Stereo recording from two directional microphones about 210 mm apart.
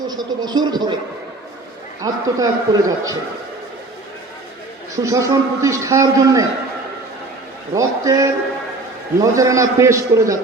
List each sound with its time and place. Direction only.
0.1 s speech: 20° right (ahead or behind)
2.0 s a man's voice: 15° right (ahead or behind)
5.0 s a man's voice: 15° right (ahead or behind)
7.7 s a man's voice: 15° right (ahead or behind)